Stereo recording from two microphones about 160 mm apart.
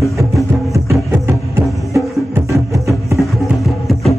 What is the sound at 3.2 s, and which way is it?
Music, centre (ahead or behind).